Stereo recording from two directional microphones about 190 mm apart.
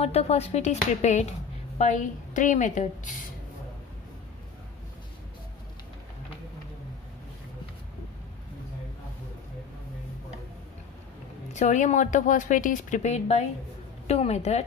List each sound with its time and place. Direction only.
0.0 s speech: 35° left (ahead or behind)
11.5 s speech: 40° left (ahead or behind)